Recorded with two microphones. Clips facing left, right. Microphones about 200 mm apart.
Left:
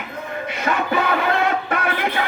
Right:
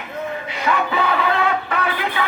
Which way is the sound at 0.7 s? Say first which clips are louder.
Right 2 dB; 45° left (ahead or behind).